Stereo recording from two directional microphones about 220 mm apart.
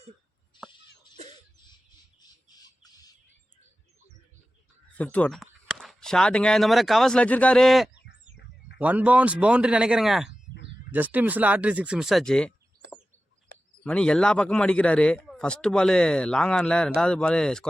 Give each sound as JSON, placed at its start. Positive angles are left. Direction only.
{"t": 1.1, "sound": "cough", "side_deg": -30}
{"t": 2.6, "sound": "squawk", "side_deg": 15}
{"t": 4.9, "sound": "a man's voice", "side_deg": 5}
{"t": 13.5, "sound": "a sound", "side_deg": -45}
{"t": 13.8, "sound": "a man's voice", "side_deg": 5}